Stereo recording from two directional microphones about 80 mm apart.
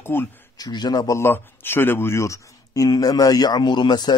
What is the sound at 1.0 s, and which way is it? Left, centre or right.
Speech, left.